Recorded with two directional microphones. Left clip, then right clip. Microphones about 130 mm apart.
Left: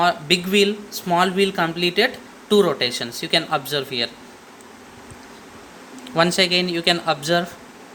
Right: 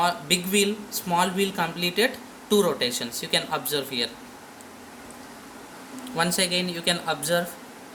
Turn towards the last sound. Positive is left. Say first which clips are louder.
# left 5 dB
turn(degrees=80)